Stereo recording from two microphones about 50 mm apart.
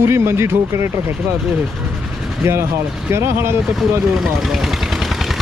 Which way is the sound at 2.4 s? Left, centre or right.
Right.